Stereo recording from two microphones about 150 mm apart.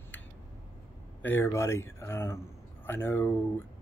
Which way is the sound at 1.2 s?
15° left (ahead or behind).